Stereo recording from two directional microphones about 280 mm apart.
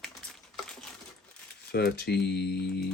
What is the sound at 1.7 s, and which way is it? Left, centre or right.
Speech, left.